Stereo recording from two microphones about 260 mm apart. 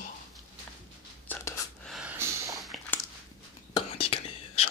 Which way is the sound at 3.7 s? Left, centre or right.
Left.